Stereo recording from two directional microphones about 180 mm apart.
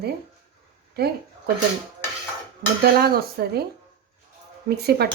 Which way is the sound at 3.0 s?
60° right (ahead or behind).